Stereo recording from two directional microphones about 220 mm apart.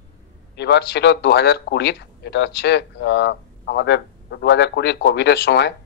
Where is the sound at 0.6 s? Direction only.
50° left (ahead or behind).